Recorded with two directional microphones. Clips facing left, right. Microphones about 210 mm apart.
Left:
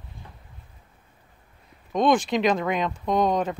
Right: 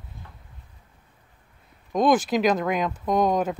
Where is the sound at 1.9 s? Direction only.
5° right (ahead or behind).